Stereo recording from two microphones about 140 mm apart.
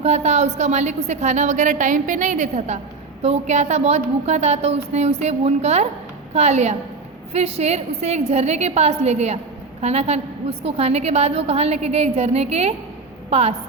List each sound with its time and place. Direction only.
0.0 s a woman's voice: 55° right (ahead or behind)